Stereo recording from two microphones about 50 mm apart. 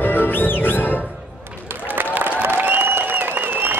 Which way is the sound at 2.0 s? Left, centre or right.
Right.